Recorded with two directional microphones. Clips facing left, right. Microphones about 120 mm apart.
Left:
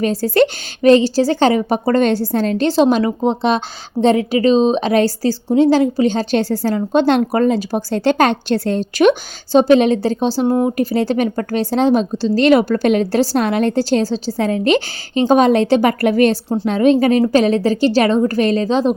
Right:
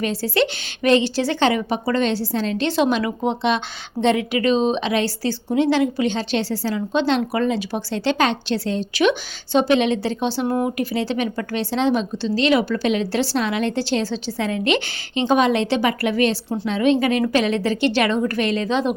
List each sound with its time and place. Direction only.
0.0 s a woman's voice: 45° left (ahead or behind)